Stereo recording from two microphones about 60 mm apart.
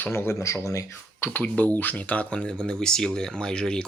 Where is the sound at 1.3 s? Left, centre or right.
Left.